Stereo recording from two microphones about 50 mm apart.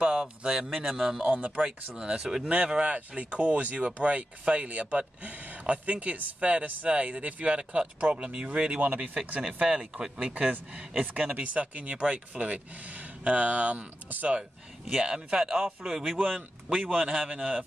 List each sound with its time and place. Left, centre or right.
0.0 s speech: centre
1.2 s speech: right
1.6 s speech: centre
9.6 s speech: centre
10.3 s speech: right
14.9 s speech: centre